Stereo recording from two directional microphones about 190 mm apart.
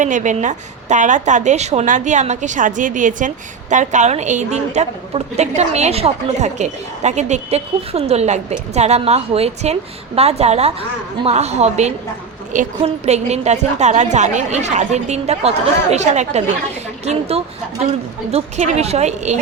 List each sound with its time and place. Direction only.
0.0 s a woman's voice: 40° right (ahead or behind)